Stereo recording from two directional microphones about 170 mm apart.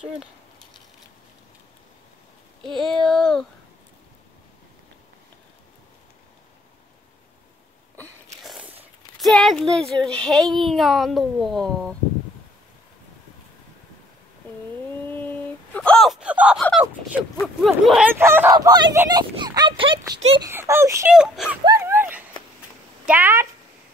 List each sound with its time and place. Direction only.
0.0 s speech: 5° right (ahead or behind)
2.8 s speech: 5° left (ahead or behind)
9.2 s speech: centre (ahead or behind)
15.0 s whimper: 10° left (ahead or behind); by 16.6 s 5° right (ahead or behind)
17.4 s speech: centre (ahead or behind); by 20.2 s 30° right (ahead or behind)
20.4 s speech: 15° right (ahead or behind)
21.1 s speech: 5° right (ahead or behind)
21.6 s a sound: 15° right (ahead or behind)
23.0 s speech: 10° right (ahead or behind)